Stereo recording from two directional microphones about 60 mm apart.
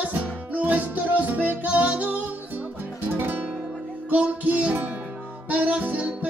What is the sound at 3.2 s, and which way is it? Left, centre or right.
Music, right.